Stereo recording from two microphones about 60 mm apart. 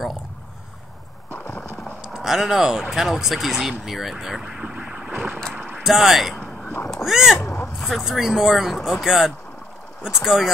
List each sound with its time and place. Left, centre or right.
2.0 s speech: centre
4.5 s vehicle: centre
5.8 s speech: centre
7.3 s a sound: left
7.8 s speech: centre